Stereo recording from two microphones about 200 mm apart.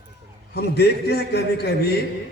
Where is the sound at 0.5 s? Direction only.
55° left (ahead or behind).